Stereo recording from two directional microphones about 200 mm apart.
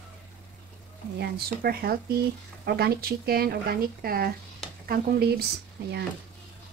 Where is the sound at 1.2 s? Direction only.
50° right (ahead or behind).